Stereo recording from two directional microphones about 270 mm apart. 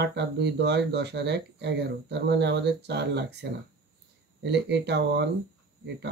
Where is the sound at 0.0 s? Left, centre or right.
Right.